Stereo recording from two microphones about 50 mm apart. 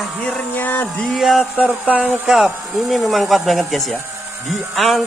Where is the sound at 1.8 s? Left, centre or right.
Right.